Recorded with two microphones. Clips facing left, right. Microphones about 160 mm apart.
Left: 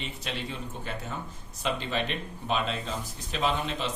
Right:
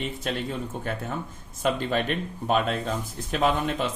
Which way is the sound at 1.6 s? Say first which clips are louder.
Right 5 dB; 50° right (ahead or behind).